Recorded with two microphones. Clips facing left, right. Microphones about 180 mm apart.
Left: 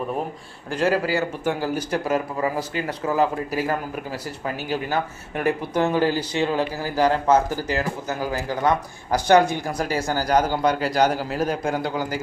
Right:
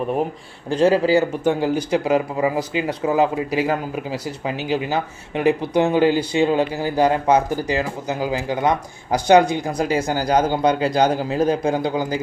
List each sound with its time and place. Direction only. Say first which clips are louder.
0.7 s a man's voice: right 6 dB; 20° right (ahead or behind)